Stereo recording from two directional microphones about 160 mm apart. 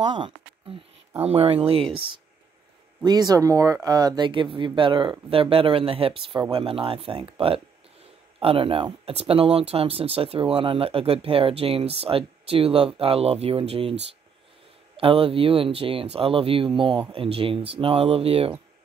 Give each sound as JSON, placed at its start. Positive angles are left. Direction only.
{"t": 0.0, "sound": "speech", "side_deg": -30}
{"t": 1.2, "sound": "speech", "side_deg": -40}
{"t": 15.0, "sound": "speech", "side_deg": -35}